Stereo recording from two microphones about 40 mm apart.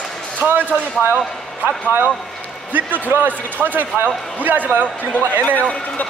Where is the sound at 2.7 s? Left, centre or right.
Right.